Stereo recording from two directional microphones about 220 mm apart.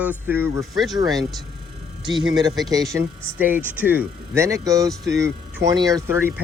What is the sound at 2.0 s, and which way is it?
A man's voice, 20° right (ahead or behind).